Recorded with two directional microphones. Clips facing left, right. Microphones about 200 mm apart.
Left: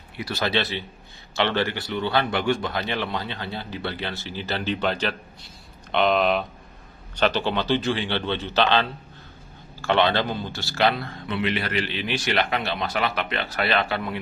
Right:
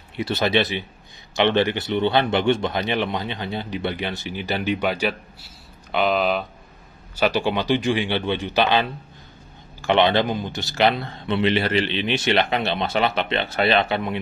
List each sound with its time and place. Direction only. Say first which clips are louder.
0.2 s speech: right 5 dB; 20° right (ahead or behind)